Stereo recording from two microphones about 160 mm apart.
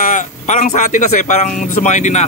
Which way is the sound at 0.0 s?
50° left (ahead or behind).